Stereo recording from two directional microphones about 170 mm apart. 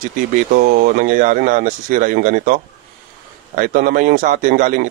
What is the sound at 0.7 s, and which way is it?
A man's voice, 50° right (ahead or behind).